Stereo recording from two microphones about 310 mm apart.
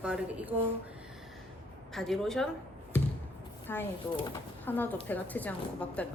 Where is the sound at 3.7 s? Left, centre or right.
Centre.